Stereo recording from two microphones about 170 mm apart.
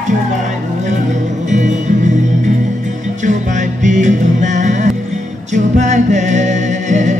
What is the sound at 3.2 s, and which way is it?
Music, 45° right (ahead or behind).